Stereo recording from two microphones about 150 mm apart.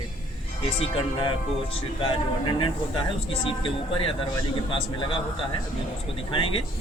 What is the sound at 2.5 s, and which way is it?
Speech, 35° left (ahead or behind).